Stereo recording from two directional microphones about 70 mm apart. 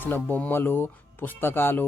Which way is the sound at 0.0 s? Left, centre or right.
Left.